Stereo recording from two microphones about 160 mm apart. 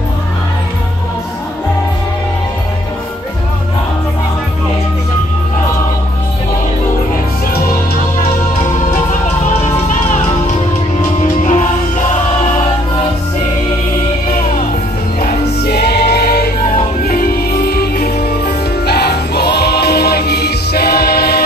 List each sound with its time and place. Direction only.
9.6 s music: 50° left (ahead or behind)
15.1 s music: 70° left (ahead or behind)